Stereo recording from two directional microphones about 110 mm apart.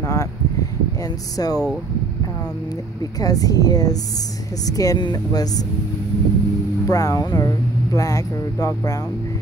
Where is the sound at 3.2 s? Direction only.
35° left (ahead or behind).